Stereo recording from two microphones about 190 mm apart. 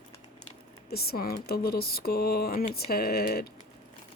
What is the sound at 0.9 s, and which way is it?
Speech, 55° left (ahead or behind).